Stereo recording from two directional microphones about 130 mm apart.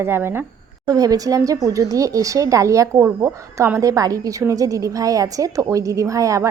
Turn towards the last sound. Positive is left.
turn(degrees=-25)  # may be behind; listen again after turning